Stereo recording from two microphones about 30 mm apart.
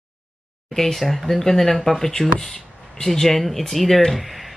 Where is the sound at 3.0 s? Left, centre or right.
Centre.